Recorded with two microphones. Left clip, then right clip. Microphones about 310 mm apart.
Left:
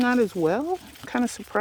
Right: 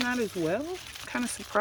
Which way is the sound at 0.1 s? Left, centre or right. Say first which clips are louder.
Left 7 dB; centre.